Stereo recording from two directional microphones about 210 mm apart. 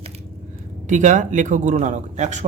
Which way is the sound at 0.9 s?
35° right (ahead or behind).